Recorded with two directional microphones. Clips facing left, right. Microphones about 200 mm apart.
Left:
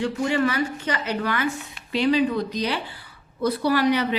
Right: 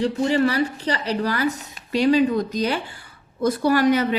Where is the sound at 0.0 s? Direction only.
35° right (ahead or behind).